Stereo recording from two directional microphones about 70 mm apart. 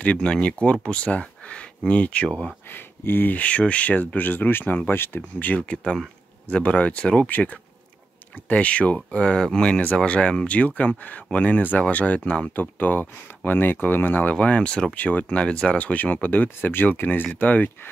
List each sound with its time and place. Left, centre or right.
0.0 s speech: centre
2.7 s speech: left
5.6 s speech: centre